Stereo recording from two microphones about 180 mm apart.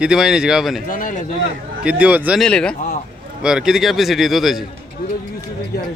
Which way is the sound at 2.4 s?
5° left (ahead or behind).